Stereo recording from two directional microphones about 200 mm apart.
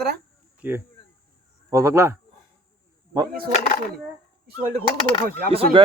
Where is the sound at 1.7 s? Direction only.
15° right (ahead or behind).